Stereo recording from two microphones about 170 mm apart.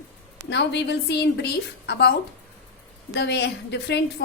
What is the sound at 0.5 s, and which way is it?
A woman's voice, 90° left.